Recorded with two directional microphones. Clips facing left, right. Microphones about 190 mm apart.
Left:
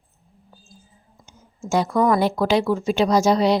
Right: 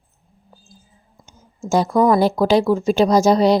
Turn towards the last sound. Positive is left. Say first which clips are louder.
# right 3 dB
turn(degrees=-40)  # may be behind; listen again after turning